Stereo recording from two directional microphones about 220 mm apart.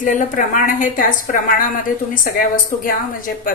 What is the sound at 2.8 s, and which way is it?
Speech, 40° left (ahead or behind).